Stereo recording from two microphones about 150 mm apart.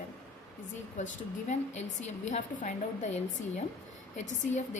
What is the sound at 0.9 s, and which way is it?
A woman's voice, 50° left (ahead or behind).